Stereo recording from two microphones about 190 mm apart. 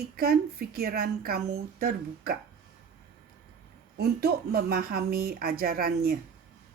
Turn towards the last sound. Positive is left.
turn(degrees=-55)  # may be behind; listen again after turning